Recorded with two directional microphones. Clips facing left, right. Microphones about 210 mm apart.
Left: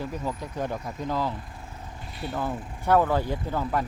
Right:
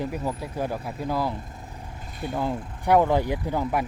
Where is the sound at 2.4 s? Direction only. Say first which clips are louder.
Right 2 dB; 15° right (ahead or behind).